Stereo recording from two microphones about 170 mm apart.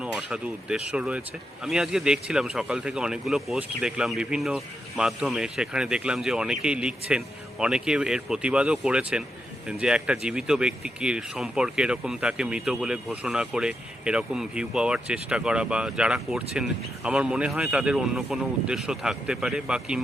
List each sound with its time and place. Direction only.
0.0 s speech: 5° right (ahead or behind)